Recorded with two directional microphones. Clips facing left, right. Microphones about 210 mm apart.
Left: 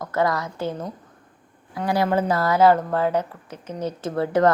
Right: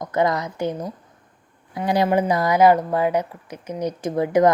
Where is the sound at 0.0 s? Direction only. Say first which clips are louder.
Right 2 dB; 20° right (ahead or behind).